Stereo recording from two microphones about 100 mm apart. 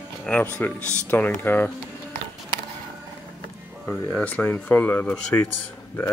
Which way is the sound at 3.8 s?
15° left (ahead or behind).